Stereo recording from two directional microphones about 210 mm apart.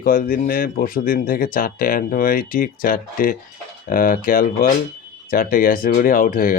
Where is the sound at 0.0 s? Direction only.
40° left (ahead or behind).